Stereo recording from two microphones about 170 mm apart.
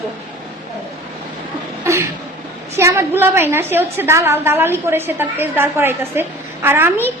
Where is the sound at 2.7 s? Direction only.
15° right (ahead or behind).